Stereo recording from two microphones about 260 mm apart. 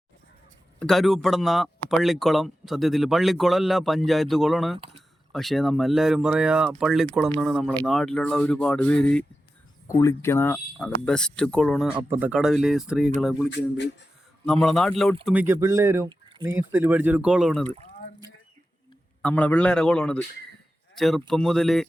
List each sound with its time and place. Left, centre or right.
0.8 s speech: centre
13.5 s speech: left
14.4 s speech: centre
19.2 s speech: centre